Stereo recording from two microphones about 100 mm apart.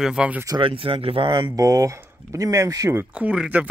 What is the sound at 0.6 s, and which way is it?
Speech, 65° right (ahead or behind).